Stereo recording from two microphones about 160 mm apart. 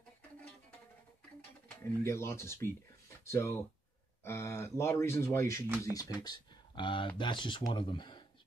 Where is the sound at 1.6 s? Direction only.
15° left (ahead or behind).